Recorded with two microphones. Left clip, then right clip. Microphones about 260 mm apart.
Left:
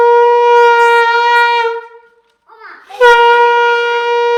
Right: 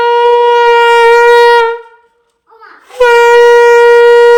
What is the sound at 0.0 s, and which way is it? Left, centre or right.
Shofar, right.